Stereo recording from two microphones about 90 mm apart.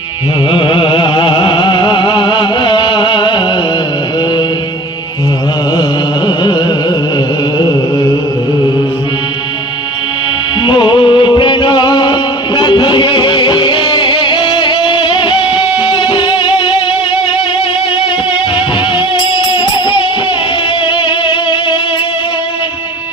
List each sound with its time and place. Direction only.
0.5 s music: 75° left (ahead or behind)
6.2 s carnatic music: 55° left (ahead or behind)
10.7 s music: 60° left (ahead or behind)
18.9 s music: 65° left (ahead or behind)